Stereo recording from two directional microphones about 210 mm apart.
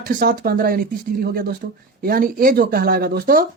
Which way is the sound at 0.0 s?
45° right (ahead or behind).